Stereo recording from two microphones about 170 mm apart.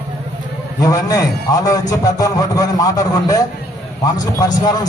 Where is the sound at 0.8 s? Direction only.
20° left (ahead or behind).